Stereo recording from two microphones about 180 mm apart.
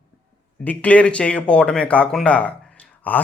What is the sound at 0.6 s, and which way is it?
A man's voice, 10° left (ahead or behind).